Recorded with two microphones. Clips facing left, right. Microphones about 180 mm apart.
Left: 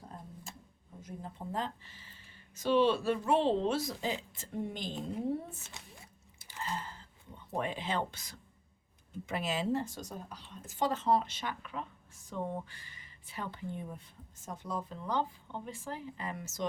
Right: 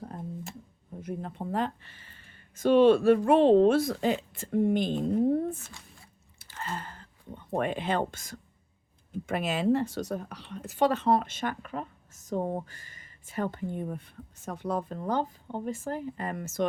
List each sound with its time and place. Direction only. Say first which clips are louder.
1.0 s speech: right 8 dB; 65° right (ahead or behind)
6.6 s a sound: right 2 dB; 60° right (ahead or behind)
9.2 s speech: right 7 dB; 55° right (ahead or behind)